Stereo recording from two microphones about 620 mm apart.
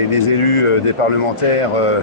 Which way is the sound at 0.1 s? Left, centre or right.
Left.